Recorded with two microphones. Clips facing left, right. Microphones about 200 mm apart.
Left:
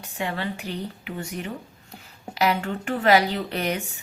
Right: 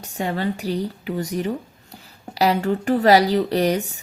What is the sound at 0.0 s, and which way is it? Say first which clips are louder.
Speech: right 5 dB; 40° right (ahead or behind).